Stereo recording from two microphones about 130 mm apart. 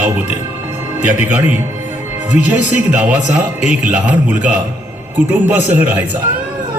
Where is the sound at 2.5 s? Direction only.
10° right (ahead or behind).